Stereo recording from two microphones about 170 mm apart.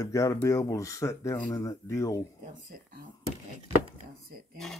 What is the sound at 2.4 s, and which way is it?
Speech, 55° right (ahead or behind).